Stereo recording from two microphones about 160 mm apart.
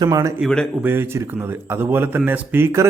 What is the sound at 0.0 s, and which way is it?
Speech, 20° right (ahead or behind).